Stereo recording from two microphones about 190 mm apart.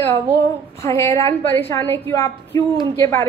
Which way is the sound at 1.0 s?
15° left (ahead or behind).